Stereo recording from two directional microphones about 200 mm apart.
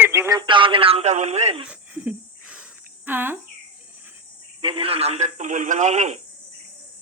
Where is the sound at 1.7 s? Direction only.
5° right (ahead or behind).